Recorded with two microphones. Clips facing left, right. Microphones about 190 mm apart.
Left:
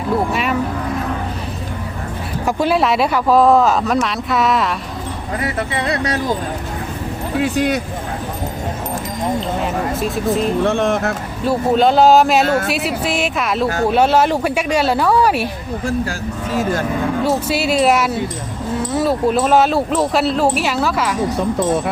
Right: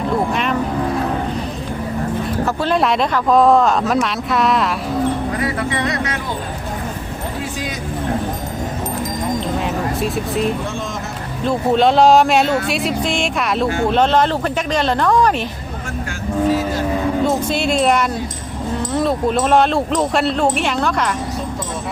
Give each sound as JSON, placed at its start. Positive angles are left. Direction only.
{"t": 2.6, "sound": "speech", "side_deg": 5}
{"t": 5.5, "sound": "speech", "side_deg": 30}
{"t": 7.4, "sound": "speech", "side_deg": 65}
{"t": 9.6, "sound": "speech", "side_deg": 0}
{"t": 10.6, "sound": "speech", "side_deg": 65}
{"t": 11.4, "sound": "speech", "side_deg": 0}
{"t": 17.2, "sound": "speech", "side_deg": 5}